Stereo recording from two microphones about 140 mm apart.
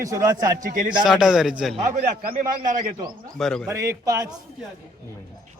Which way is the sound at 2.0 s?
90° right.